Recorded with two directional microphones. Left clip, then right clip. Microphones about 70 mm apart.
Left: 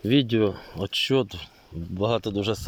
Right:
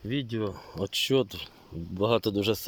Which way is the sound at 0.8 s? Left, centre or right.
Right.